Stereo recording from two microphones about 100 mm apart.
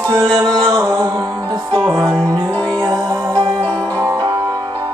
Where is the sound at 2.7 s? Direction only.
30° right (ahead or behind).